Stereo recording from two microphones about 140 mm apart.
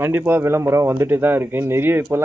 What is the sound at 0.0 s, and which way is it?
A man's voice, 15° right (ahead or behind).